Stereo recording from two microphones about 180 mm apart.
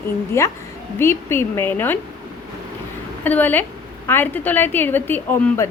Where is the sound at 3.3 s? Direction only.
10° left (ahead or behind).